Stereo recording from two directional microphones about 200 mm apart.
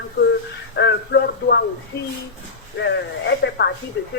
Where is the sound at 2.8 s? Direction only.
60° left (ahead or behind).